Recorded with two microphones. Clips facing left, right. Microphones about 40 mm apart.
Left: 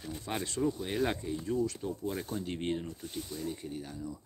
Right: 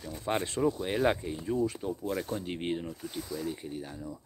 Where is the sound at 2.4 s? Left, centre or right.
Centre.